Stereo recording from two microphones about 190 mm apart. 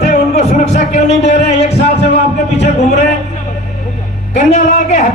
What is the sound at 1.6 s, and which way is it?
Music, 35° left (ahead or behind).